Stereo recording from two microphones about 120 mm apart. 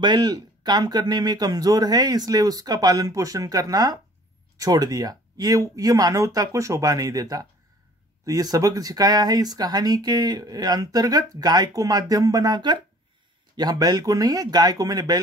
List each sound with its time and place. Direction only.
0.0 s speech: 35° right (ahead or behind)